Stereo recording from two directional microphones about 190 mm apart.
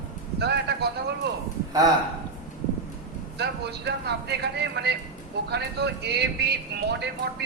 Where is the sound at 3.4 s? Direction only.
60° right (ahead or behind).